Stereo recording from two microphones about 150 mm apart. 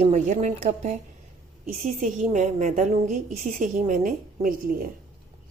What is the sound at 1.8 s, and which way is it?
A woman's voice, 60° right (ahead or behind).